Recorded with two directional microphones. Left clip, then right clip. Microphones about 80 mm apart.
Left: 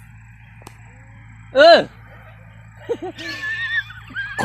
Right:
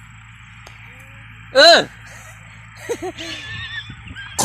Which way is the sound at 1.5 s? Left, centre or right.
Right.